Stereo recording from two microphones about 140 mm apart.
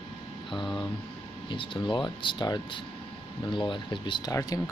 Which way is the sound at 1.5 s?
35° left (ahead or behind).